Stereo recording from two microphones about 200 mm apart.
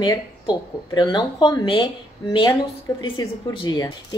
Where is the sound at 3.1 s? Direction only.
20° left (ahead or behind).